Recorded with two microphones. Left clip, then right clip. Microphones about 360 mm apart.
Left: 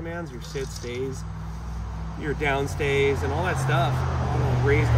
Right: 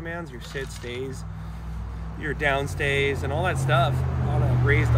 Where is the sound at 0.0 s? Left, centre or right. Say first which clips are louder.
Even; centre.